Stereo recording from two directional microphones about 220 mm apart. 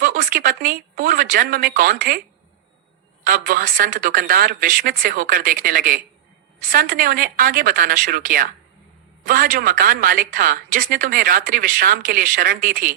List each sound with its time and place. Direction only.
0.0 s a woman's voice: 40° right (ahead or behind)
3.2 s a woman's voice: 40° right (ahead or behind)